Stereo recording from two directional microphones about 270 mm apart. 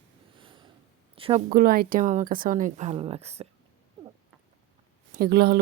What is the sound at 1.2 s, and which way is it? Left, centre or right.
Speech, right.